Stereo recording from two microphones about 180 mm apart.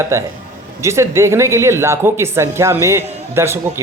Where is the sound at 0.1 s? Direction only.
15° right (ahead or behind).